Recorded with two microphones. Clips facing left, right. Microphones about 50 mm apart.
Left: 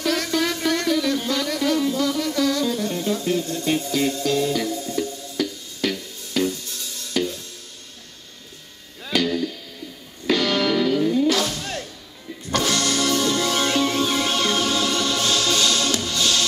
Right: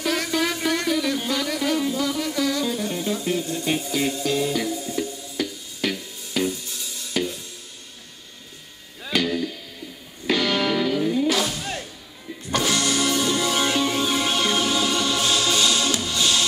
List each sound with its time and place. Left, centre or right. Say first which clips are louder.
0.0 s music: left 1 dB; centre
9.1 s music: left 1 dB; centre